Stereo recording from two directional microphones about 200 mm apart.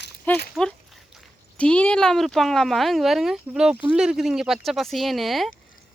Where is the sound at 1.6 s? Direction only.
5° left (ahead or behind).